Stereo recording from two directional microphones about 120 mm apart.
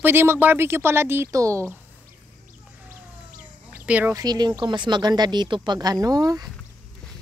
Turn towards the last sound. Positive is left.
turn(degrees=-30)  # may be behind; listen again after turning